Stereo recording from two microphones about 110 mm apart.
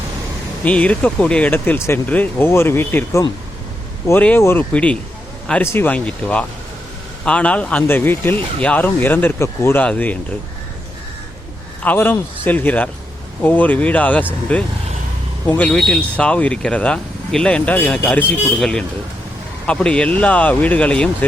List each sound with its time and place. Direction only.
0.6 s speech: 10° left (ahead or behind)
4.4 s speech: 25° left (ahead or behind)
4.7 s speech: 10° left (ahead or behind)
5.6 s speech: 20° left (ahead or behind)
5.9 s speech: 10° left (ahead or behind)
9.8 s speech: 15° left (ahead or behind)
11.8 s speech: 15° left (ahead or behind)